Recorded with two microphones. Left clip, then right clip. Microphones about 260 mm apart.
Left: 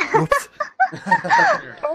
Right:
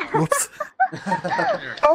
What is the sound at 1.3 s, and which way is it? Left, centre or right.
Speech, left.